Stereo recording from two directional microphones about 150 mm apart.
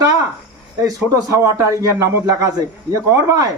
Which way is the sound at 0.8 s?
20° right (ahead or behind).